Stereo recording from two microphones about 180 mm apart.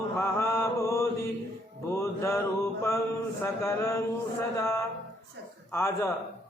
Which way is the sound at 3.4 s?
15° left (ahead or behind).